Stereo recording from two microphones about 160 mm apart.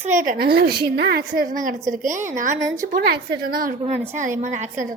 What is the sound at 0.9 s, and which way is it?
Speech, 90° right.